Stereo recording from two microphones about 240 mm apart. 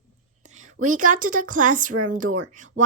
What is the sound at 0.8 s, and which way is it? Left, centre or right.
Speech, right.